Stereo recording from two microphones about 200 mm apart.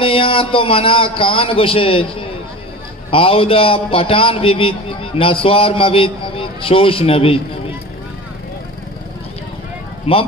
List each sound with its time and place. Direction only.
0.0 s a man's voice: 25° left (ahead or behind)
10.1 s a man's voice: 30° left (ahead or behind)